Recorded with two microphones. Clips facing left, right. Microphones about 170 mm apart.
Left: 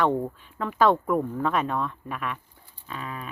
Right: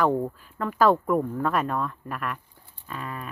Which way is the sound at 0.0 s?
5° right (ahead or behind).